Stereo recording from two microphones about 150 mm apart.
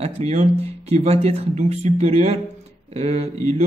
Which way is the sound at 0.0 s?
45° right (ahead or behind).